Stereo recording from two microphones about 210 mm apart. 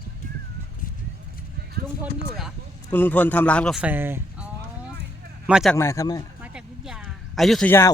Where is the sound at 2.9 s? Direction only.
10° left (ahead or behind).